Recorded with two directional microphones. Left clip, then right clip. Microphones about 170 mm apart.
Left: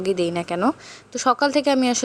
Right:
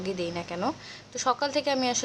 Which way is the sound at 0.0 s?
40° left (ahead or behind).